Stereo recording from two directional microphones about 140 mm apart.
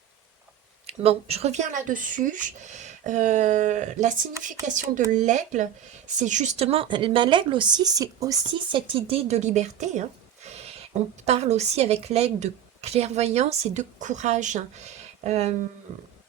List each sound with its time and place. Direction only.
0.9 s speech: 45° right (ahead or behind)